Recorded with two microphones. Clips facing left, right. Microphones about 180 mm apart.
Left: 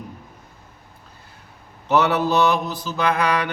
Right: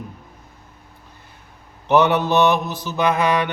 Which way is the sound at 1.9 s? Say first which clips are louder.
Right 2 dB; 20° right (ahead or behind).